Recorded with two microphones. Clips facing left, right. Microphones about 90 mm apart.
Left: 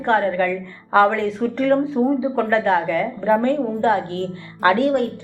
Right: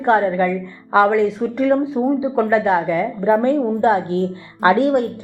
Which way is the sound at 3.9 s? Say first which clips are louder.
Right 3 dB; 30° right (ahead or behind).